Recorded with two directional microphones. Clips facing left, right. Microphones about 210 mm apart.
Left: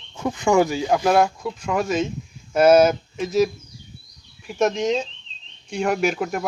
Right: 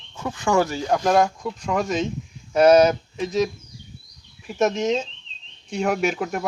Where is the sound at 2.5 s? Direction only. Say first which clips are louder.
Even; 5° left (ahead or behind).